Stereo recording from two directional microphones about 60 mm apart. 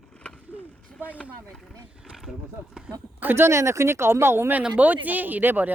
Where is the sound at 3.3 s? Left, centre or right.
Right.